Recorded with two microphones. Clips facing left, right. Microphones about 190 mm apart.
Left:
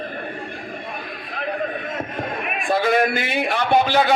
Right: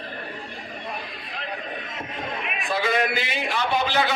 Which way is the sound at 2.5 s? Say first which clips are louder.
Left 6 dB; 50° left (ahead or behind).